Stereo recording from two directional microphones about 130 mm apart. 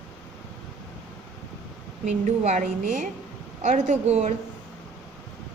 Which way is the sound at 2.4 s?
70° right (ahead or behind).